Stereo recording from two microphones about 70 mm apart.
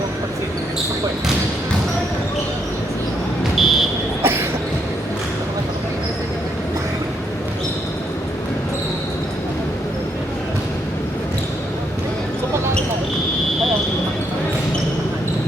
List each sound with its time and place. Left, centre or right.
3.6 s buzzer: centre
4.2 s cough: right